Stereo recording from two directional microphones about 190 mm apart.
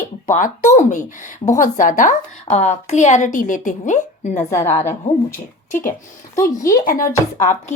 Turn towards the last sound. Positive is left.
turn(degrees=40)  # may be behind; listen again after turning